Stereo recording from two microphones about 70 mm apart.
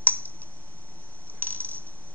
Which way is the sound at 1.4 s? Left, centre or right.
Right.